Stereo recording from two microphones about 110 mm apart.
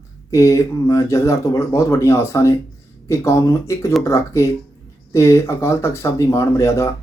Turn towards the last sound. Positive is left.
turn(degrees=25)  # may be behind; listen again after turning